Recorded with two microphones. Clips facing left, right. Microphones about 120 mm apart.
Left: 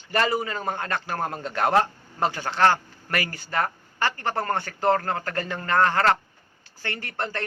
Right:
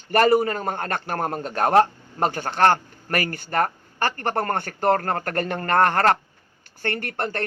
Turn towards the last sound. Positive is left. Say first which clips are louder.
# right 4 dB
turn(degrees=-55)  # may be behind; listen again after turning